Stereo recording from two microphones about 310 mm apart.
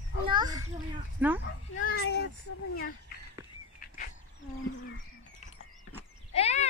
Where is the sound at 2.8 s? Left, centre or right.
Left.